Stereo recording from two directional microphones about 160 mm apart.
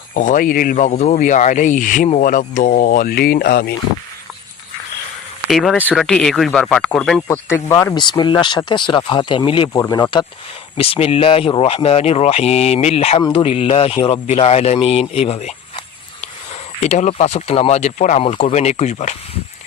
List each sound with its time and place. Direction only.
0.1 s speech: 55° left (ahead or behind); by 3.8 s 80° left
5.5 s speech: centre (ahead or behind)
5.7 s speech: 10° left (ahead or behind)
7.3 s speech: 15° left (ahead or behind)
7.9 s speech: 30° left (ahead or behind)
16.8 s speech: 45° left (ahead or behind)